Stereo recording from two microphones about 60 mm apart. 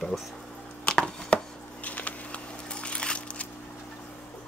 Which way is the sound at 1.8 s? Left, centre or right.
Left.